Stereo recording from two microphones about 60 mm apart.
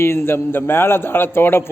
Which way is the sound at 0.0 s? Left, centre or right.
Left.